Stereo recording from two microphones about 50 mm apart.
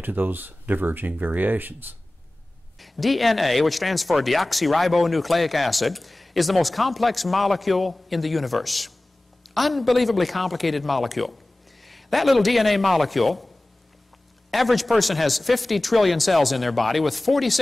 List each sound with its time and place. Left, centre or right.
0.0 s speech: right
2.8 s speech: centre
14.5 s speech: centre